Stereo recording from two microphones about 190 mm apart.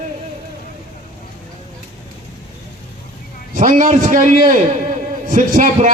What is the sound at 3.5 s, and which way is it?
A man's voice, 40° right (ahead or behind).